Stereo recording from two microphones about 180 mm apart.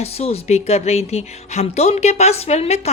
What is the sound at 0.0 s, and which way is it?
Speech, 35° left (ahead or behind).